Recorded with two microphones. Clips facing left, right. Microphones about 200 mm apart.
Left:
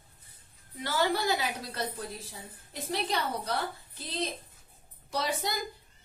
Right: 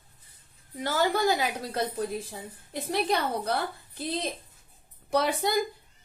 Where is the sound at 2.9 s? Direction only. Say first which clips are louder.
Right 5 dB; 55° right (ahead or behind).